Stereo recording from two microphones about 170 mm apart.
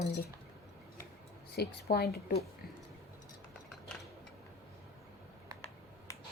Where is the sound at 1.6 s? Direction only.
70° left (ahead or behind).